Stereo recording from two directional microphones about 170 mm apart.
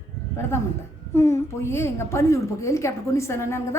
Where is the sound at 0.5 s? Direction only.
15° left (ahead or behind).